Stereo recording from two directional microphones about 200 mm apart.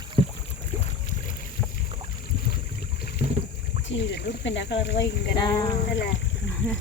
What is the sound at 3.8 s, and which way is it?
Speech, 60° left (ahead or behind).